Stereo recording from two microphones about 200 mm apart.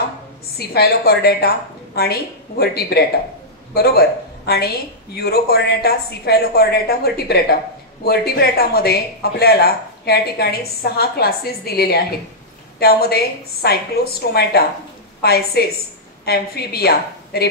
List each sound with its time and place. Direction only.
0.6 s speech: 50° left (ahead or behind)
5.1 s speech: 50° left (ahead or behind)